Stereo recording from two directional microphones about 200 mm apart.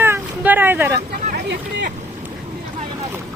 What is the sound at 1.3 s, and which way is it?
Speech, 50° right (ahead or behind).